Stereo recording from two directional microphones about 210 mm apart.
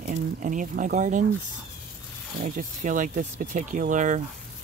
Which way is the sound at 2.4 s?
40° right (ahead or behind).